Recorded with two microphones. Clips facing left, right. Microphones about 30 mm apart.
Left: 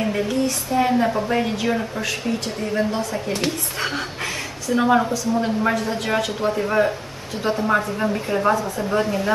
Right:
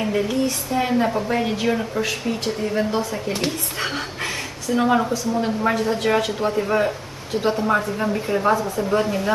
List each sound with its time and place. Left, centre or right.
0.0 s a woman's voice: centre